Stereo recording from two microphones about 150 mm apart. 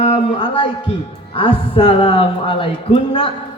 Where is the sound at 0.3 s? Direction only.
35° left (ahead or behind).